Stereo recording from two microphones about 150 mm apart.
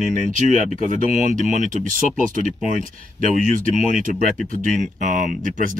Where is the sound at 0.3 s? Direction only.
60° right (ahead or behind).